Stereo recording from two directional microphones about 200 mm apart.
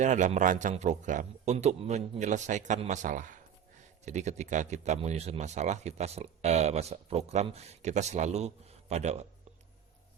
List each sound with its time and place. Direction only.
0.0 s speech: 40° right (ahead or behind)